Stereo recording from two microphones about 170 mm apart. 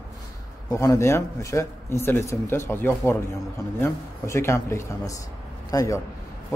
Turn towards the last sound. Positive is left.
turn(degrees=20)  # may be behind; listen again after turning